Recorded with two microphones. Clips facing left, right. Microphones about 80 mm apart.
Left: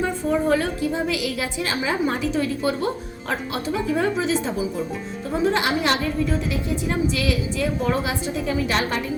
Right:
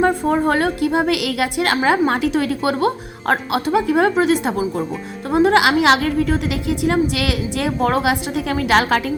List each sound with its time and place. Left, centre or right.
0.0 s a woman's voice: right
4.1 s speech: right
5.3 s a woman's voice: right